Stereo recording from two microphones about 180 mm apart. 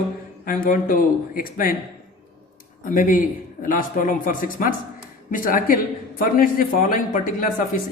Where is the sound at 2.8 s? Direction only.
50° left (ahead or behind).